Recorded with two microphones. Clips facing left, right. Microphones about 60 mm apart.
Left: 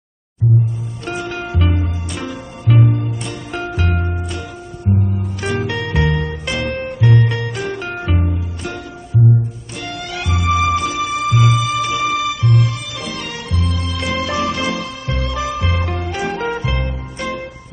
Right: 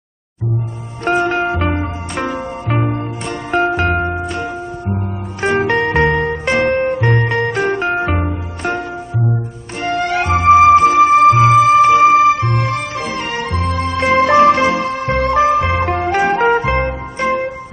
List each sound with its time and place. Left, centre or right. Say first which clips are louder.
1.0 s music: right 10 dB; right